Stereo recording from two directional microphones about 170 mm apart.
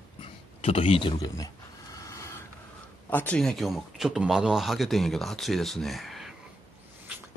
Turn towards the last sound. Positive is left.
turn(degrees=0)  # may be behind; listen again after turning